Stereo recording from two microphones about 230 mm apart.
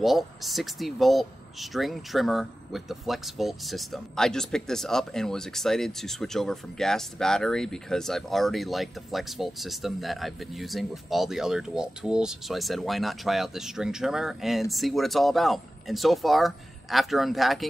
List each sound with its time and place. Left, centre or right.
0.0 s speech: centre